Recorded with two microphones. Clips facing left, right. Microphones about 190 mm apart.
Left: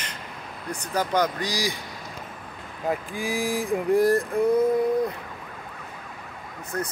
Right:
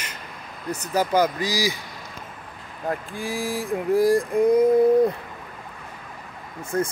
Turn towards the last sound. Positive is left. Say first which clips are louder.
# right 6 dB
turn(degrees=-25)  # may be behind; listen again after turning